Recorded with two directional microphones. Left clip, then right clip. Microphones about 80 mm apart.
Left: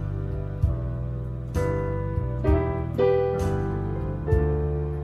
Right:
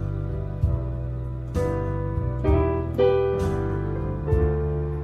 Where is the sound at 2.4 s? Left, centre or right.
Centre.